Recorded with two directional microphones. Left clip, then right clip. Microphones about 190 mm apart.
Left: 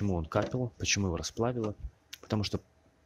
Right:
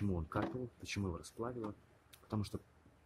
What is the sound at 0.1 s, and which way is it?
Speech, 35° left (ahead or behind).